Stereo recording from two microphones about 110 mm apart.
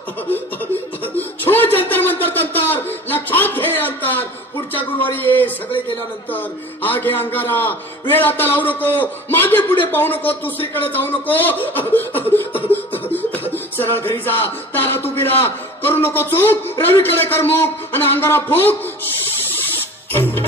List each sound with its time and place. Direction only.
1.1 s a sound: 15° left (ahead or behind)
4.7 s a man's voice: 15° left (ahead or behind)
13.5 s music: 20° left (ahead or behind)
20.1 s music: 20° left (ahead or behind)